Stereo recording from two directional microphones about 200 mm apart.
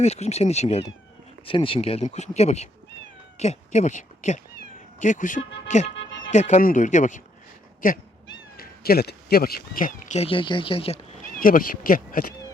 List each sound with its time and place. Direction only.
0.0 s speech: 30° left (ahead or behind)
8.5 s speech: 50° left (ahead or behind); by 11.0 s 30° left (ahead or behind)
11.3 s speech: 45° left (ahead or behind)